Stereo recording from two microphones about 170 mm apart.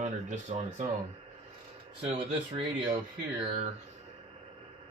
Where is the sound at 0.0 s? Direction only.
45° right (ahead or behind).